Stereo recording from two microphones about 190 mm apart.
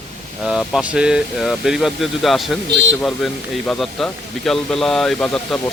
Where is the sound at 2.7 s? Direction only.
75° right (ahead or behind).